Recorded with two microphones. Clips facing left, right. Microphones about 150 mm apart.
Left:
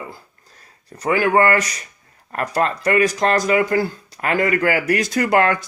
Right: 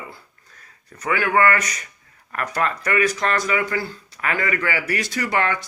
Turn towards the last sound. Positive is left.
turn(degrees=45)  # may be behind; listen again after turning